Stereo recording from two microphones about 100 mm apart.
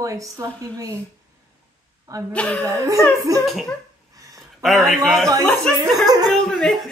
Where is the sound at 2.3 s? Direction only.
15° left (ahead or behind).